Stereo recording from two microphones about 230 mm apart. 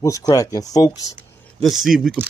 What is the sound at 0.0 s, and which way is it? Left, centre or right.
Speech, centre.